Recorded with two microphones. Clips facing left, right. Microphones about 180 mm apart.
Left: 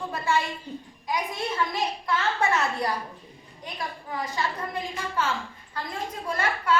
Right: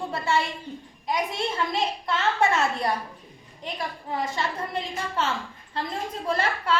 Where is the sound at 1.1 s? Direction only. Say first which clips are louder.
Right 2 dB; 25° right (ahead or behind).